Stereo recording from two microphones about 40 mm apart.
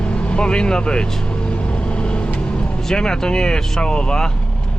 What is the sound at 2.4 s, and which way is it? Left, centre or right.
Speech, left.